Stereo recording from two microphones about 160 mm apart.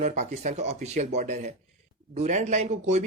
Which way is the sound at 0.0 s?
50° right (ahead or behind).